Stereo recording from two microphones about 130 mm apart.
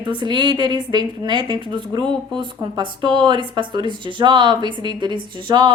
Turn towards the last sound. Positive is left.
turn(degrees=-35)  # may be behind; listen again after turning